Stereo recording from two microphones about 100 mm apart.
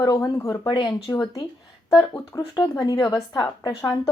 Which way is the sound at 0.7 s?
40° left (ahead or behind).